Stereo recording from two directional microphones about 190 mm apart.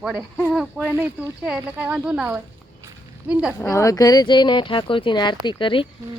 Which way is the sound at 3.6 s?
15° left (ahead or behind).